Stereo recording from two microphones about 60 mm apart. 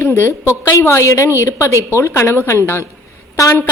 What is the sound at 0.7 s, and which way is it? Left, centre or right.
A woman's voice, left.